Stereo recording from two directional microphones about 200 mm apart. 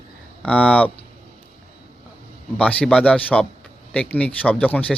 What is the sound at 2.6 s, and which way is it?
Speech, 5° left (ahead or behind).